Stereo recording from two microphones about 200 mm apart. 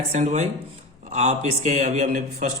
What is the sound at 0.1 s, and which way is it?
A man's voice, 35° right (ahead or behind).